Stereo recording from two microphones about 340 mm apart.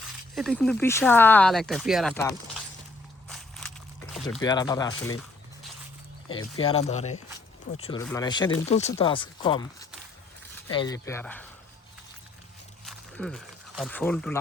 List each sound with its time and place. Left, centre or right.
0.3 s speech: centre
3.2 s walk: centre
4.1 s a sound: centre
4.4 s speech: centre
6.3 s speech: centre
10.7 s speech: centre
12.8 s a sound: centre